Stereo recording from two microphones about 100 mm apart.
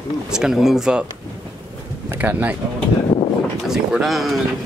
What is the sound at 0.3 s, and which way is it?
Speech, 5° right (ahead or behind).